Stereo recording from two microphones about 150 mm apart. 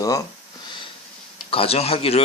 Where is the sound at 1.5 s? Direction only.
40° left (ahead or behind).